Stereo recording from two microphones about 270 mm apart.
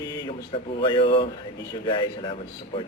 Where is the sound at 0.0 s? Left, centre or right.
Centre.